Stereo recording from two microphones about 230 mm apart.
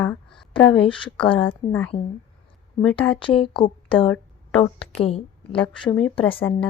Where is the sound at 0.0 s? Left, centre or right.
Centre.